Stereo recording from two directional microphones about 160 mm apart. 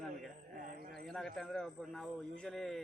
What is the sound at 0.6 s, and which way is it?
Speech, 60° right (ahead or behind).